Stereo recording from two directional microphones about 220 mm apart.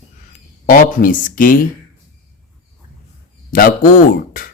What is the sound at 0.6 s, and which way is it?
Speech, 40° left (ahead or behind).